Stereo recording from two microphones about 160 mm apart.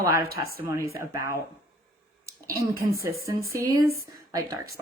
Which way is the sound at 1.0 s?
20° right (ahead or behind).